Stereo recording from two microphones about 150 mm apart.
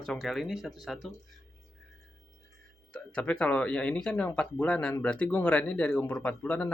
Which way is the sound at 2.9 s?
5° left (ahead or behind).